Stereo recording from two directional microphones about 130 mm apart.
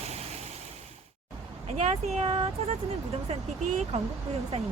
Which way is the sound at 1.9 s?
50° right (ahead or behind).